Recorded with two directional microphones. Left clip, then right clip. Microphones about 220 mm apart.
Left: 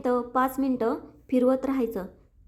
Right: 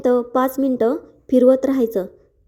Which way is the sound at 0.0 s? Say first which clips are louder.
Right 7 dB; 20° right (ahead or behind).